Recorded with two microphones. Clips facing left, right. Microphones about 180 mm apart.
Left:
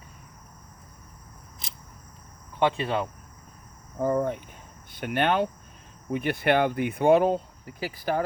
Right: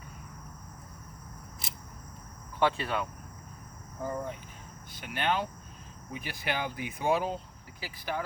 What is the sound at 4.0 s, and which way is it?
Speech, 55° left (ahead or behind).